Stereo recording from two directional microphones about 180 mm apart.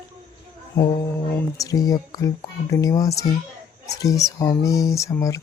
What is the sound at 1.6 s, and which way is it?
Speech, 20° left (ahead or behind).